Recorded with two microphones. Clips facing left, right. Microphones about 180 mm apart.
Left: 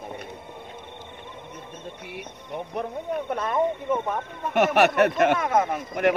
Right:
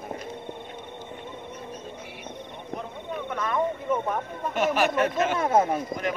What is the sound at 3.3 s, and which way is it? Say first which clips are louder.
Speech: even; 30° left (ahead or behind).